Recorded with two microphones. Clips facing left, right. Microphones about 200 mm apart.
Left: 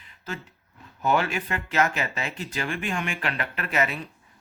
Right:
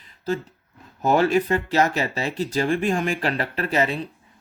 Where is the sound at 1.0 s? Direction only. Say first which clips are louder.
Right 6 dB; 40° right (ahead or behind).